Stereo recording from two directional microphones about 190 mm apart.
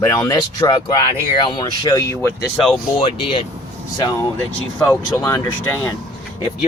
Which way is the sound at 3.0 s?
25° left (ahead or behind).